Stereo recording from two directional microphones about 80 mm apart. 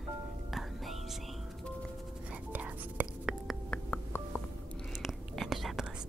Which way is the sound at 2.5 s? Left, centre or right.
Right.